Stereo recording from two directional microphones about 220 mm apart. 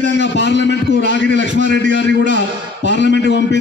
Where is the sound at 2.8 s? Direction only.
50° left (ahead or behind).